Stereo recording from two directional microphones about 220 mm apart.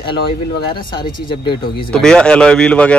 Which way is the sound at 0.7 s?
20° left (ahead or behind).